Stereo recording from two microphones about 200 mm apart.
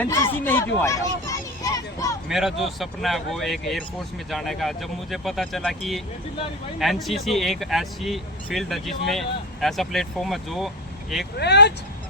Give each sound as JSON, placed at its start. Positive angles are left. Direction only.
{"t": 0.0, "sound": "a sound", "side_deg": 10}
{"t": 2.3, "sound": "speech", "side_deg": 0}
{"t": 11.3, "sound": "speech", "side_deg": 55}